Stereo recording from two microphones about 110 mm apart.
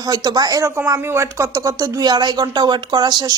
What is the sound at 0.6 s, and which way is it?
Speech, 20° right (ahead or behind).